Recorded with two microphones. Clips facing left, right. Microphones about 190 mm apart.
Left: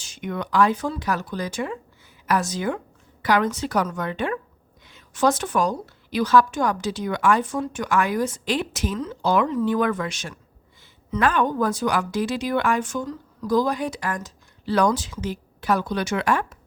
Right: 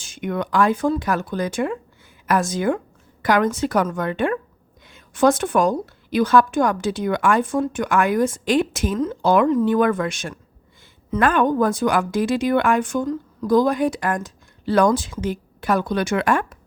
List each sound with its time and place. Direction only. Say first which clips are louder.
0.0 s a woman's voice: right 4 dB; 55° right (ahead or behind)